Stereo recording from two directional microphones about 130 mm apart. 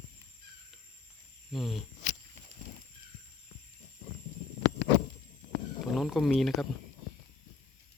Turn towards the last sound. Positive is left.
turn(degrees=0)  # may be behind; listen again after turning